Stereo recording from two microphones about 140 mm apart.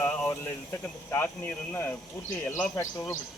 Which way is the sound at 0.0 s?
15° left (ahead or behind).